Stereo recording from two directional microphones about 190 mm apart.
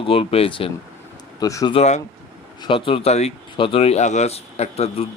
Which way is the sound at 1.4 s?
20° left (ahead or behind).